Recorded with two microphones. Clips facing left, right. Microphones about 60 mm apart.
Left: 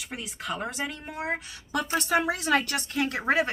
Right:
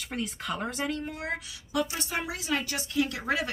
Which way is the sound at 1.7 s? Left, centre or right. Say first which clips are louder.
Left 5 dB; left.